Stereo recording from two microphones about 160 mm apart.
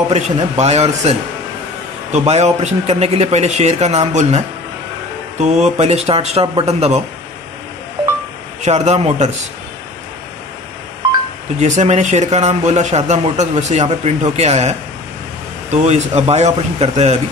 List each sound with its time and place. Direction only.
0.1 s speech: 45° right (ahead or behind)
2.1 s speech: 45° right (ahead or behind)
5.4 s speech: 45° right (ahead or behind)
8.6 s speech: 45° right (ahead or behind)
11.6 s speech: 45° right (ahead or behind)